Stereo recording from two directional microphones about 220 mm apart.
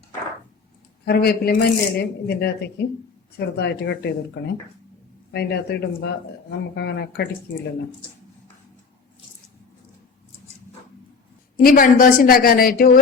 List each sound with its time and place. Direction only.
1.0 s speech: 45° left (ahead or behind)
5.3 s speech: 45° left (ahead or behind)
11.5 s a woman's voice: 40° left (ahead or behind)